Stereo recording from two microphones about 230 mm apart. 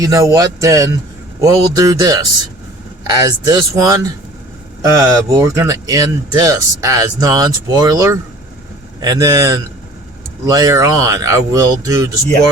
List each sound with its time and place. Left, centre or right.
0.0 s speech: centre